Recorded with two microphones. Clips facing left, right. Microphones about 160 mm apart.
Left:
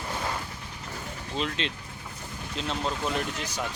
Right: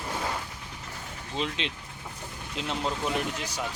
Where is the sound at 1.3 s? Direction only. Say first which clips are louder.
Left 1 dB; 15° right (ahead or behind).